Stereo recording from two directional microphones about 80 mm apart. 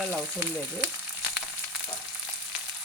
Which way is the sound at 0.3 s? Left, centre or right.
Centre.